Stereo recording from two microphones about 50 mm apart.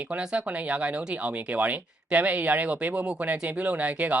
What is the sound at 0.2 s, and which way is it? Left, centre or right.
Speech, centre.